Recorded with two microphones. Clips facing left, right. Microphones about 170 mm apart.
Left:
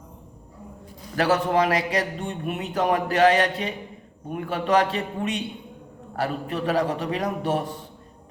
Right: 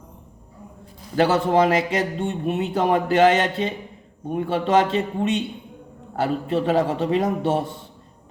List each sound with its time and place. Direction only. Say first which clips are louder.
1.1 s a man's voice: right 3 dB; 25° right (ahead or behind)